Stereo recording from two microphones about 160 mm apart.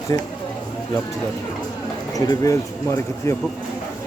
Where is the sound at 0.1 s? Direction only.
20° left (ahead or behind).